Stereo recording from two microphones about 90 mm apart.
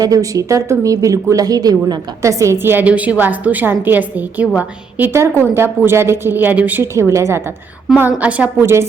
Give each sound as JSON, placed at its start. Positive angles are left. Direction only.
{"t": 0.0, "sound": "a woman's voice", "side_deg": -40}
{"t": 5.1, "sound": "a woman's voice", "side_deg": -30}
{"t": 6.9, "sound": "speech", "side_deg": -35}
{"t": 7.9, "sound": "a woman's voice", "side_deg": -15}
{"t": 8.6, "sound": "speech", "side_deg": -30}